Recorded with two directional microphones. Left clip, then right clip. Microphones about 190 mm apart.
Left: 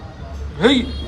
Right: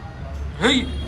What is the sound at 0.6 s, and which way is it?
Speech, 25° left (ahead or behind).